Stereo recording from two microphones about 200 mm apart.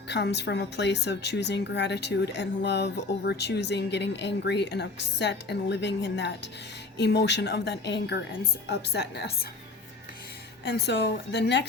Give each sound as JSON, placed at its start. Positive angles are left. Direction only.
{"t": 0.1, "sound": "a woman's voice", "side_deg": 60}
{"t": 10.7, "sound": "a woman's voice", "side_deg": 55}